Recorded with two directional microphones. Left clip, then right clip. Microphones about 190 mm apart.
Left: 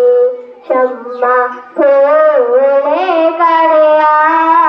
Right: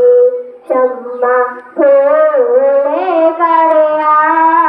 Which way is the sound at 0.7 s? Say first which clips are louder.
Even; 40° left (ahead or behind).